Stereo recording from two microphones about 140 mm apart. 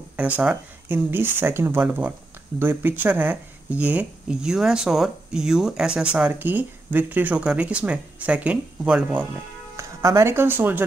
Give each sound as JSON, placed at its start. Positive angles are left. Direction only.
{"t": 0.1, "sound": "speech", "side_deg": -10}
{"t": 9.8, "sound": "speech", "side_deg": -20}